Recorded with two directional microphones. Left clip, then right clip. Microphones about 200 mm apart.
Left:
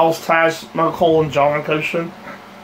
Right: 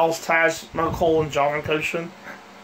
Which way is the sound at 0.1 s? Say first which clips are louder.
Left 4 dB; 15° right (ahead or behind).